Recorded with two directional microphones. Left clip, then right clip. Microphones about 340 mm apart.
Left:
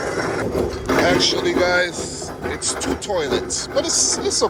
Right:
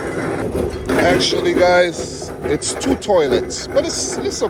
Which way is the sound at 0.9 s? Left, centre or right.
Centre.